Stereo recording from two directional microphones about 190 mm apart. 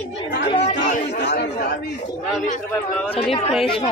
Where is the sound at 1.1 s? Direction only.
60° left (ahead or behind).